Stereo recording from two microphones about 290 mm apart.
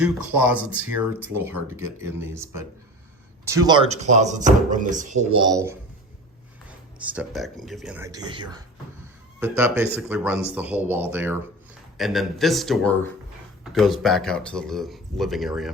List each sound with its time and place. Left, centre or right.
0.0 s speech: centre; by 5.5 s right
5.5 s speech: centre
7.0 s speech: centre